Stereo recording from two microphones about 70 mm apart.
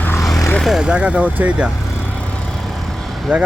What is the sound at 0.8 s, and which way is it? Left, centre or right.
Speech, centre.